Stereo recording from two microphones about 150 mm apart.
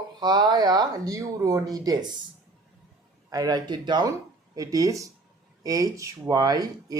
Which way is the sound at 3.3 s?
25° right (ahead or behind).